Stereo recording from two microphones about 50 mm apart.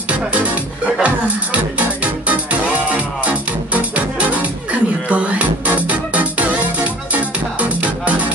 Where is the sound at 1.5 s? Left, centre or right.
Right.